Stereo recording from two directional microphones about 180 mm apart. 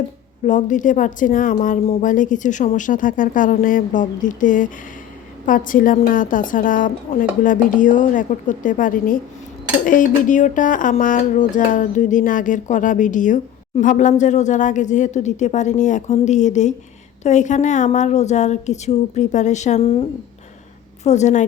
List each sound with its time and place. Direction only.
0.4 s a woman's voice: 45° left (ahead or behind)